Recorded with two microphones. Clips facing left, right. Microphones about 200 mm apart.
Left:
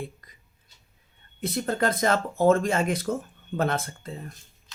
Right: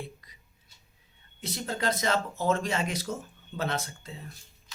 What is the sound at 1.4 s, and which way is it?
Speech, 55° left (ahead or behind).